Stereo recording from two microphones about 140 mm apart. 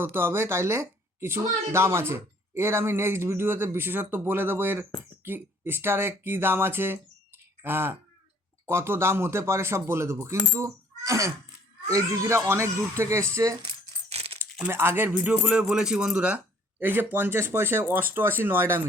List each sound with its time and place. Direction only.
0.0 s a woman's voice: 15° right (ahead or behind)
14.1 s crumpling: 50° right (ahead or behind)
14.6 s a woman's voice: 15° right (ahead or behind)